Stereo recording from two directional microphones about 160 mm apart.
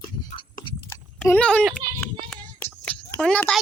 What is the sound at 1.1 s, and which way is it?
Speech, 10° left (ahead or behind).